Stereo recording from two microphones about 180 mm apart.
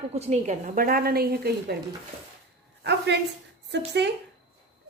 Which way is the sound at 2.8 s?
75° right (ahead or behind).